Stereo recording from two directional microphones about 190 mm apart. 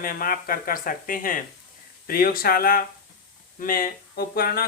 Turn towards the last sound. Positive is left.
turn(degrees=50)  # may be behind; listen again after turning